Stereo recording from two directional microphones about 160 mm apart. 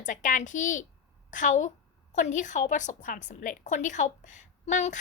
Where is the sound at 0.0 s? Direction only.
55° left (ahead or behind).